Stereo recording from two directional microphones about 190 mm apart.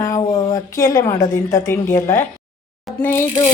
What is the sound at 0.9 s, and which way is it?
Speech, 15° left (ahead or behind).